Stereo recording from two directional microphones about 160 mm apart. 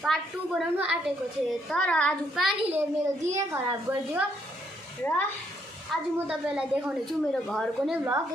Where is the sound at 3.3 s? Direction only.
15° right (ahead or behind).